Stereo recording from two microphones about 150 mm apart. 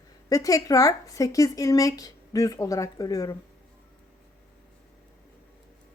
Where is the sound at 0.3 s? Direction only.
25° left (ahead or behind).